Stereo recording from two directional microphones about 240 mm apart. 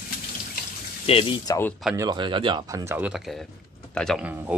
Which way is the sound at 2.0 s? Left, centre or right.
Centre.